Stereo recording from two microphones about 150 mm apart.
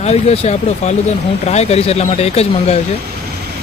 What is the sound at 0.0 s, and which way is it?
Speech, 45° left (ahead or behind).